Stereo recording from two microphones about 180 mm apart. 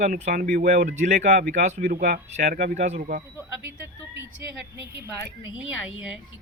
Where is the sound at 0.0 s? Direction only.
45° right (ahead or behind).